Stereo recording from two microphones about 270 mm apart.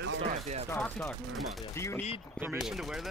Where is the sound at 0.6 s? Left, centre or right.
Centre.